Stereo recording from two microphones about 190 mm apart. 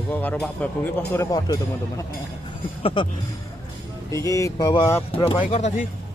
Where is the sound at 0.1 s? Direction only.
10° left (ahead or behind); by 3.1 s 25° left (ahead or behind).